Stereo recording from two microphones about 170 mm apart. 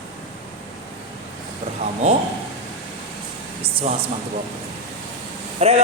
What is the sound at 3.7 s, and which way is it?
Speech, 35° right (ahead or behind).